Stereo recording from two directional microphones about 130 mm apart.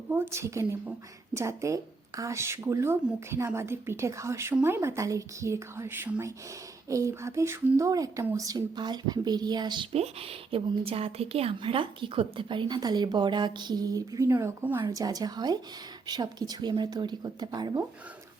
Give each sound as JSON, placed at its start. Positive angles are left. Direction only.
{"t": 0.1, "sound": "speech", "side_deg": -20}
{"t": 9.9, "sound": "speech", "side_deg": -50}
{"t": 14.8, "sound": "speech", "side_deg": -30}